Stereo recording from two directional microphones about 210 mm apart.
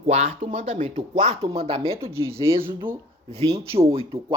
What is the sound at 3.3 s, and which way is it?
Speech, 30° right (ahead or behind).